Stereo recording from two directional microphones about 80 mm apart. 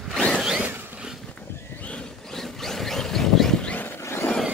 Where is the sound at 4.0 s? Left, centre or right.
Left.